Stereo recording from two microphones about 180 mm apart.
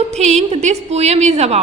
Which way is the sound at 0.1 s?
40° right (ahead or behind).